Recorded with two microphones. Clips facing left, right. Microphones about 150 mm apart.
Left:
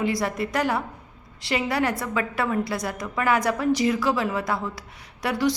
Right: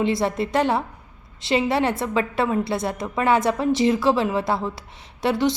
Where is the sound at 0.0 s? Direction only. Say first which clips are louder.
Right 3 dB; 25° right (ahead or behind).